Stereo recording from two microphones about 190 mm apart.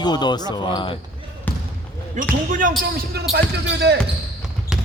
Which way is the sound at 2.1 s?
45° right (ahead or behind).